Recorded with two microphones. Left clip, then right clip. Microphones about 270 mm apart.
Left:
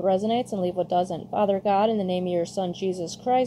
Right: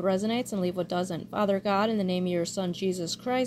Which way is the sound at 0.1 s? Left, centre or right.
Right.